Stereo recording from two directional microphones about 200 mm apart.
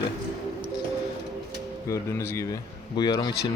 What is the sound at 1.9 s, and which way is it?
Speech, 15° left (ahead or behind).